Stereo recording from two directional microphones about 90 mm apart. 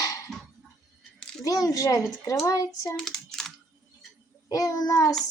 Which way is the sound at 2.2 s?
35° left (ahead or behind).